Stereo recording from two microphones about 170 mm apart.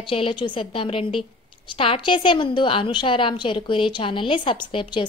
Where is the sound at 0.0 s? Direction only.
30° left (ahead or behind).